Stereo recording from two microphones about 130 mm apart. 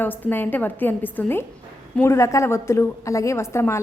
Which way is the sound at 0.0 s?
15° left (ahead or behind).